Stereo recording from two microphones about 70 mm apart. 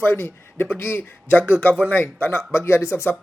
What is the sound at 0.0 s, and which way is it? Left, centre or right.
Speech, left.